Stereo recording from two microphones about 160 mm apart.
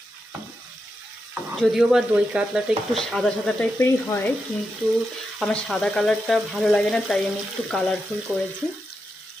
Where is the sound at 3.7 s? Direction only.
15° left (ahead or behind).